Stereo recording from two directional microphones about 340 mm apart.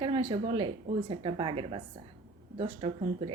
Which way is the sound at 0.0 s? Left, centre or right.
Centre.